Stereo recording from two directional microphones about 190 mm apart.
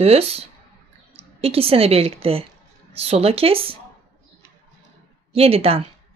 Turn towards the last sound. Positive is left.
turn(degrees=-30)  # may be behind; listen again after turning